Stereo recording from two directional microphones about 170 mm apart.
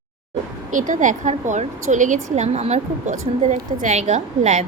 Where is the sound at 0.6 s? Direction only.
50° right (ahead or behind).